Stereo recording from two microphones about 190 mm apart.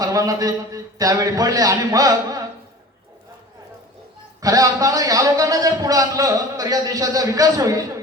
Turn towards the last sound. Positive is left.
turn(degrees=-20)  # may be behind; listen again after turning